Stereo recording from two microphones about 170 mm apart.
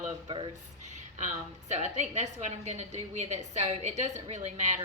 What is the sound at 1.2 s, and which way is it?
A woman's voice, 45° right (ahead or behind).